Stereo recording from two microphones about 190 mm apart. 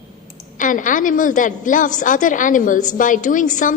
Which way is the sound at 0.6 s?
45° left (ahead or behind).